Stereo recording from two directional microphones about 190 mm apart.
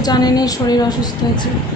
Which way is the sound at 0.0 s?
20° left (ahead or behind).